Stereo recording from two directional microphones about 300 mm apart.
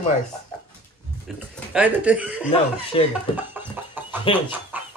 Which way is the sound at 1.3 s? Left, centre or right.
Centre.